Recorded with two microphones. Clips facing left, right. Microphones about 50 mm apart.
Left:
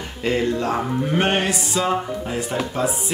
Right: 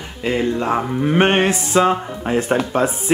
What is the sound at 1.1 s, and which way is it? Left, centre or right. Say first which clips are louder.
Speech: right 6 dB; right.